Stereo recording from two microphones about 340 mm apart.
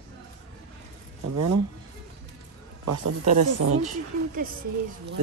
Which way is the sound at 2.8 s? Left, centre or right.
Right.